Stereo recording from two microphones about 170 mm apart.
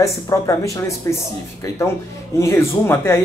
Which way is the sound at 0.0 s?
20° left (ahead or behind).